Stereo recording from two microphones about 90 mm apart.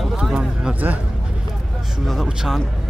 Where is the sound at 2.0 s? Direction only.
Centre (ahead or behind).